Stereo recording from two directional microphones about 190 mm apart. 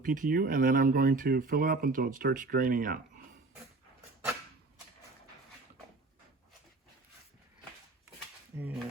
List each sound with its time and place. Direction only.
0.0 s speech: 45° right (ahead or behind)
8.5 s speech: 10° right (ahead or behind)